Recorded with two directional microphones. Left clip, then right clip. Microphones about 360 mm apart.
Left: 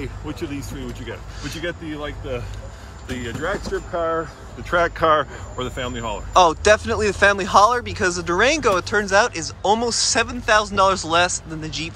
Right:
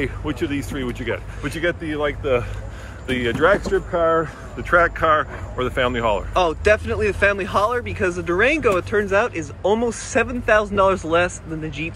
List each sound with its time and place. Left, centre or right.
0.0 s speech: centre
3.3 s speech: right
4.6 s speech: centre
5.6 s speech: centre